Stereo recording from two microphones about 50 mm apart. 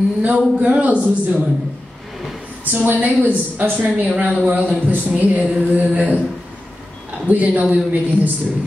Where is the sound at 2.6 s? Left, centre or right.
Right.